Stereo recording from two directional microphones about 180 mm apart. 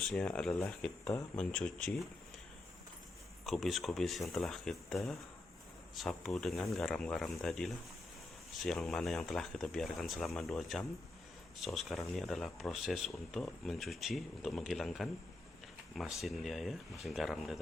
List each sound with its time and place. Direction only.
0.1 s speech: 5° left (ahead or behind)
1.0 s speech: 20° left (ahead or behind)
1.4 s speech: 5° left (ahead or behind)
3.4 s speech: centre (ahead or behind)